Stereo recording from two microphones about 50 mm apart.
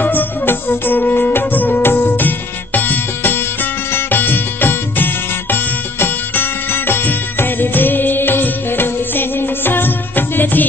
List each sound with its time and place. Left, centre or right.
0.0 s music: left